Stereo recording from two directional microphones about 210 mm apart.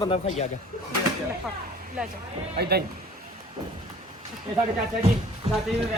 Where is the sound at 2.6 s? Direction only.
50° right (ahead or behind).